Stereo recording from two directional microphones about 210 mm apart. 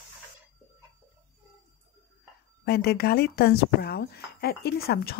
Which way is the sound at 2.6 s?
50° left (ahead or behind).